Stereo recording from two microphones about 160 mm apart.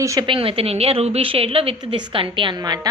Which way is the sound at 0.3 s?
35° right (ahead or behind).